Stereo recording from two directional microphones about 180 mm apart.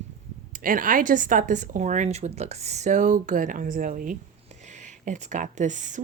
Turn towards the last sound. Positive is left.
turn(degrees=-45)  # may be behind; listen again after turning